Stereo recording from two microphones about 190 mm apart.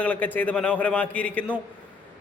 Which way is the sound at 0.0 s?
10° left (ahead or behind).